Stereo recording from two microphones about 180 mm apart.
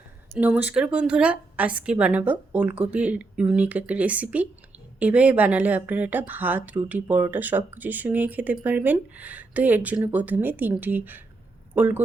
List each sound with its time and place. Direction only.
0.3 s speech: 10° right (ahead or behind)